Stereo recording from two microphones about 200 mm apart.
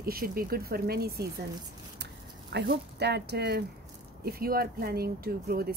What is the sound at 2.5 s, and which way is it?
Speech, 55° right (ahead or behind).